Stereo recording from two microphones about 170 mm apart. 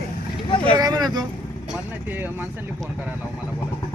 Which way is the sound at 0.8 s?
20° right (ahead or behind).